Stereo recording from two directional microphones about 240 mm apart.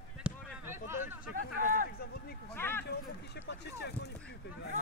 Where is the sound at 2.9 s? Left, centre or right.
Left.